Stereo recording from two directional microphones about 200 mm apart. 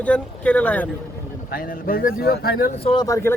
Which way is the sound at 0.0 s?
5° left (ahead or behind).